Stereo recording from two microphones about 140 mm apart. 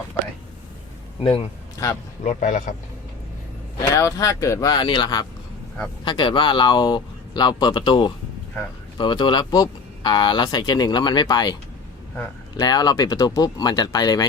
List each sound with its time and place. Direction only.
1.2 s a man's voice: 40° left (ahead or behind)
2.2 s speech: 65° left (ahead or behind)
3.9 s speech: 25° left (ahead or behind)
12.5 s speech: 30° left (ahead or behind)